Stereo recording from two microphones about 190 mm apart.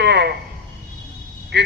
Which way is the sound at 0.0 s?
60° right (ahead or behind).